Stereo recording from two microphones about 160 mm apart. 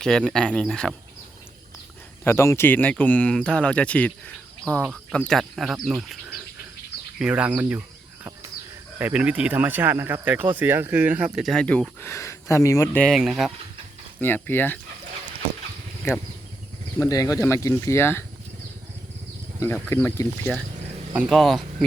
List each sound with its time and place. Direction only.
0.0 s speech: 5° left (ahead or behind)
2.2 s speech: 15° left (ahead or behind)
13.1 s speech: 5° right (ahead or behind)
14.2 s speech: 10° left (ahead or behind)
17.0 s speech: 20° left (ahead or behind)
19.8 s speech: 10° left (ahead or behind)
21.1 s speech: 5° right (ahead or behind)